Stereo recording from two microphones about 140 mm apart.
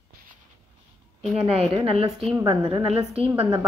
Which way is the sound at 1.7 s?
45° right (ahead or behind).